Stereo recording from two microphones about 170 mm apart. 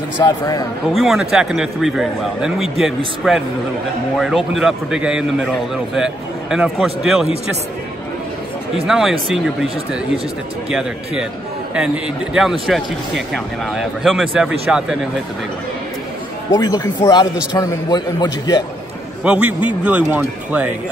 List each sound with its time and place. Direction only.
0.2 s a man's voice: 20° left (ahead or behind)
0.9 s speech: centre (ahead or behind)
8.8 s speech: 5° right (ahead or behind)
10.7 s speech: 5° right (ahead or behind)
16.5 s a man's voice: 20° left (ahead or behind)
19.2 s a man's voice: 5° right (ahead or behind)